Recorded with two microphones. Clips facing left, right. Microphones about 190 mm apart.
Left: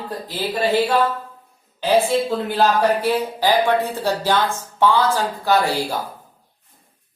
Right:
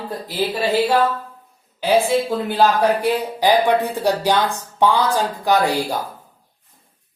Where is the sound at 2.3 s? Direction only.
15° right (ahead or behind).